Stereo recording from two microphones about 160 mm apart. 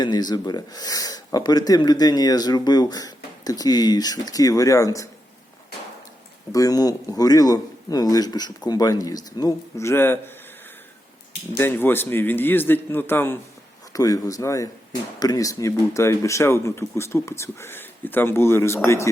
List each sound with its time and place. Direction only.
0.0 s speech: 25° left (ahead or behind)
6.5 s speech: 20° left (ahead or behind)
11.5 s speech: 15° left (ahead or behind)